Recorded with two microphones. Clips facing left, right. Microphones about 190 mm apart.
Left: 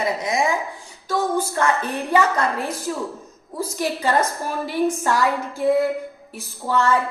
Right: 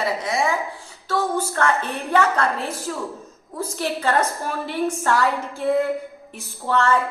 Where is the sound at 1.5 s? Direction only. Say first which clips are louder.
Left 1 dB; 10° left (ahead or behind).